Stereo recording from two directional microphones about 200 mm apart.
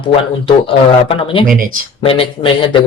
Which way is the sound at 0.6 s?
25° left (ahead or behind).